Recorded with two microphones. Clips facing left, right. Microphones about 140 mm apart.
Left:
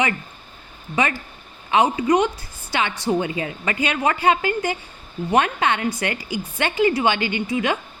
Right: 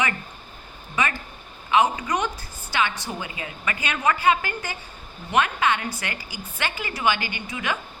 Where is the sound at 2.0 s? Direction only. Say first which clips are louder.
Left 8 dB; 30° left (ahead or behind).